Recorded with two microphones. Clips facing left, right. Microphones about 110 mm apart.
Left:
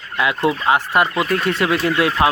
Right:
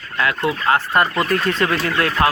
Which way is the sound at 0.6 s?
15° left (ahead or behind).